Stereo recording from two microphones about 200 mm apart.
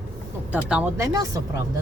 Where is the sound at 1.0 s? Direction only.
15° right (ahead or behind).